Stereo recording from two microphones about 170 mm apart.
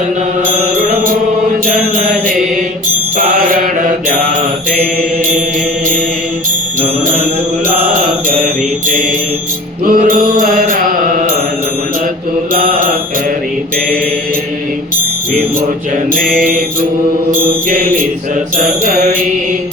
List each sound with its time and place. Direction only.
0.8 s music: 55° right (ahead or behind)
1.6 s mantra: 50° right (ahead or behind)
9.8 s mantra: 55° right (ahead or behind)
16.1 s mantra: 55° right (ahead or behind)
18.5 s mantra: 50° right (ahead or behind)